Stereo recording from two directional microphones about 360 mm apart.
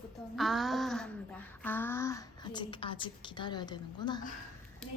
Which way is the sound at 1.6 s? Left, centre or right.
Centre.